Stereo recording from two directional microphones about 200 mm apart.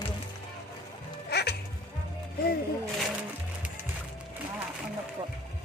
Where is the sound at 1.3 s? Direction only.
55° left (ahead or behind).